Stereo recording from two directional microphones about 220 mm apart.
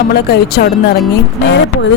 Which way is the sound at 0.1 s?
45° left (ahead or behind).